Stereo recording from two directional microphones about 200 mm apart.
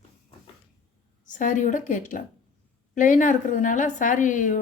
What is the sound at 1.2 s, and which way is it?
Speech, 40° left (ahead or behind).